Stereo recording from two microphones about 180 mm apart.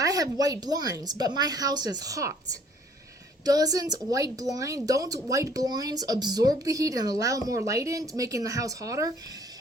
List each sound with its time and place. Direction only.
0.0 s speech: 20° right (ahead or behind)